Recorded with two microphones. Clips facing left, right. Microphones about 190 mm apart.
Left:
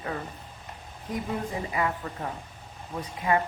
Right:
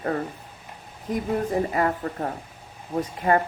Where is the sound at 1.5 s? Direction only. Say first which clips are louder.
Right 6 dB; 45° right (ahead or behind).